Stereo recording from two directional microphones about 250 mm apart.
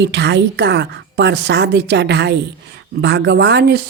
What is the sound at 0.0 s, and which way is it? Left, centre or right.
Speech, right.